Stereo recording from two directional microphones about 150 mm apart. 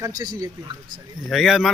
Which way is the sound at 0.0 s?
25° right (ahead or behind).